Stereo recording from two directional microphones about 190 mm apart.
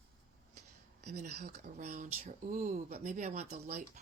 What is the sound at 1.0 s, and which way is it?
Speech, 35° right (ahead or behind).